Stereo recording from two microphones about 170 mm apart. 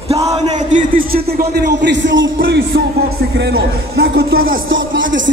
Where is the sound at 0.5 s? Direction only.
50° right (ahead or behind).